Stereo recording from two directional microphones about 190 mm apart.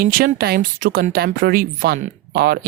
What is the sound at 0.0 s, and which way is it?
Speech, 50° right (ahead or behind).